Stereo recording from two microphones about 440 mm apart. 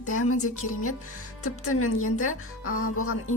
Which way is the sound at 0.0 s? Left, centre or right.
Left.